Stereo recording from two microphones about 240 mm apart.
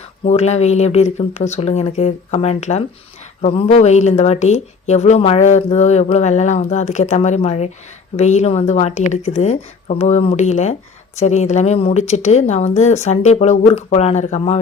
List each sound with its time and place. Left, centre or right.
0.3 s speech: left